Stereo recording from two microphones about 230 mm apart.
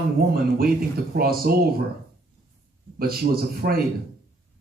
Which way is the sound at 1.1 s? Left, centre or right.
Right.